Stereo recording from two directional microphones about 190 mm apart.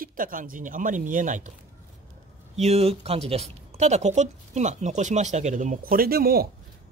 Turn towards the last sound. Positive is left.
turn(degrees=-50)  # may be behind; listen again after turning